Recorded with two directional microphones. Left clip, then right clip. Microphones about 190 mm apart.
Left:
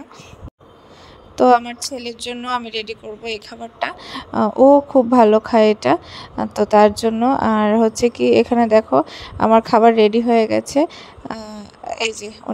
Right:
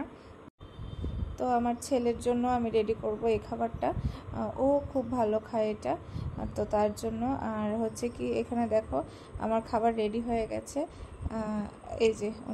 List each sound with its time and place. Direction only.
1.3 s a woman's voice: 45° left (ahead or behind)